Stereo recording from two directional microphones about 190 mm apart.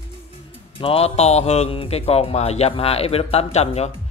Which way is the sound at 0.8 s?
30° left (ahead or behind).